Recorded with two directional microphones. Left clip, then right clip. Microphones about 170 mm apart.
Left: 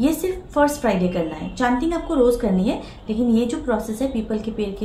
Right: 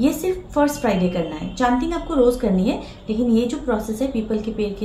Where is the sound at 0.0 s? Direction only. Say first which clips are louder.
Right 1 dB; 10° left (ahead or behind).